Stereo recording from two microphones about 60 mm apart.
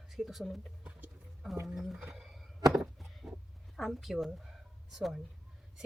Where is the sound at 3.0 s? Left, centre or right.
Centre.